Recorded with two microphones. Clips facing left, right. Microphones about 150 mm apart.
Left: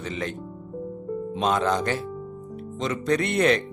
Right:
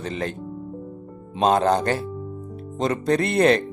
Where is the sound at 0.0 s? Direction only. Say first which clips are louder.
Right 3 dB; 35° right (ahead or behind).